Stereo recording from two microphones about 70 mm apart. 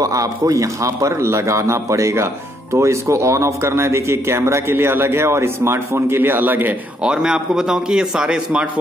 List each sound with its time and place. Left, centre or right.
0.0 s a man's voice: right
7.0 s a man's voice: centre